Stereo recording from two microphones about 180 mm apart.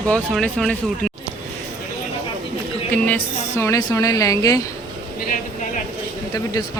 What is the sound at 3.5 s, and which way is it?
Speech, 15° left (ahead or behind).